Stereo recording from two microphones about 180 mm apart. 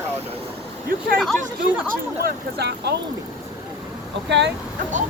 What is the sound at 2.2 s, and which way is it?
Speech, 65° right (ahead or behind).